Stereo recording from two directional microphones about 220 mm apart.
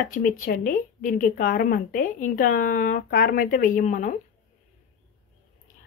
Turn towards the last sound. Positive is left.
turn(degrees=35)  # may be behind; listen again after turning